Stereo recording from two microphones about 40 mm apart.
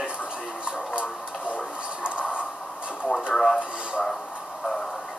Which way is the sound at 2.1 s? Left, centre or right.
Left.